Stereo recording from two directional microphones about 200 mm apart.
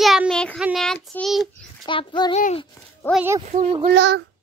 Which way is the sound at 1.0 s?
Centre (ahead or behind).